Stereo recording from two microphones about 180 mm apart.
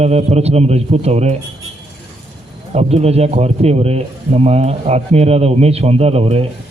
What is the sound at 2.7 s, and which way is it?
Speech, 35° right (ahead or behind).